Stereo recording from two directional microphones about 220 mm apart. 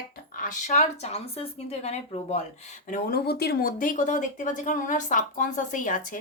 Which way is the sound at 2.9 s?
45° left (ahead or behind).